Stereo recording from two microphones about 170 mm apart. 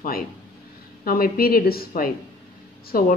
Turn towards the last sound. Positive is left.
turn(degrees=60)  # may be behind; listen again after turning